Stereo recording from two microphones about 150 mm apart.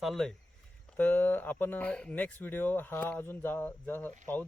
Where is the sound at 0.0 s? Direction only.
Centre (ahead or behind).